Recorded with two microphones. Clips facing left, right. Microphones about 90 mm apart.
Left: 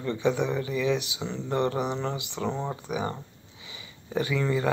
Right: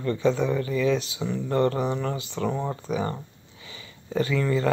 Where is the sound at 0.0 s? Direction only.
15° left (ahead or behind).